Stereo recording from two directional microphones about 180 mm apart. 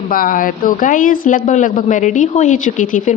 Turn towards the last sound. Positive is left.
turn(degrees=45)  # may be behind; listen again after turning